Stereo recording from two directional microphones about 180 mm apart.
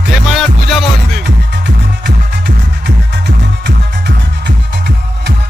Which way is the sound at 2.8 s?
70° right (ahead or behind).